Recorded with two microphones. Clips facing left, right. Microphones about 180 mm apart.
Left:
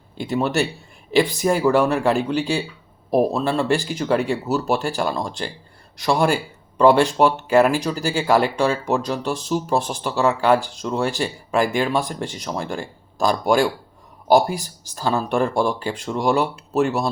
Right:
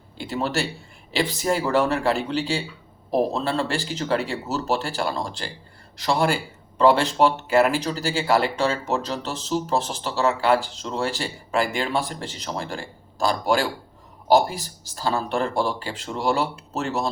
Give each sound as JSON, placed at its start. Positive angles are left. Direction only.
{"t": 0.2, "sound": "speech", "side_deg": 15}